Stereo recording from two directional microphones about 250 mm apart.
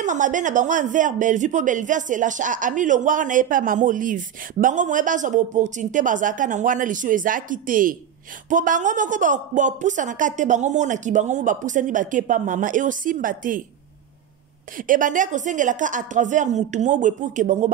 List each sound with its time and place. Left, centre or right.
0.0 s speech: right
14.8 s speech: right